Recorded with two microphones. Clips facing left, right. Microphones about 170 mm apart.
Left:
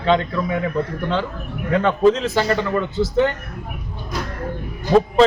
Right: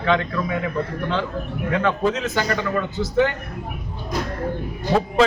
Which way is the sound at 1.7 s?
30° left (ahead or behind).